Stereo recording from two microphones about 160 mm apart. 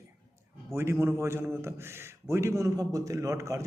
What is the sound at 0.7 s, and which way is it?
A man's voice, 15° right (ahead or behind).